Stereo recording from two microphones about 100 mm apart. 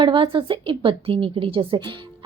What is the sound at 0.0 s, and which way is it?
A woman's voice, 55° right (ahead or behind).